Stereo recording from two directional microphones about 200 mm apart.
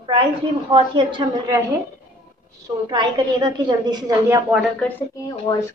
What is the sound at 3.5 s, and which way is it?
A woman's voice, 20° right (ahead or behind).